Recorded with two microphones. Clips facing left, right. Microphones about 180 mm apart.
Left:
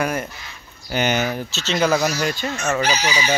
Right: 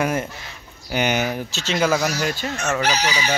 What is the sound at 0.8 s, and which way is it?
A man's voice, 10° right (ahead or behind).